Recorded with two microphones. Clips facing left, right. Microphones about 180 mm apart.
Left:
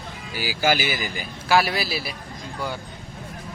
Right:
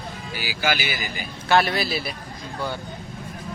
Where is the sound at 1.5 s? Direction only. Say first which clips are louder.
Right 1 dB; 5° left (ahead or behind).